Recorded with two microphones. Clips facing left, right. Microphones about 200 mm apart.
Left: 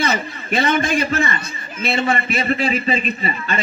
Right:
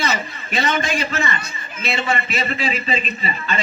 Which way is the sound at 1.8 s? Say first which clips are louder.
Left 3 dB; 55° left (ahead or behind).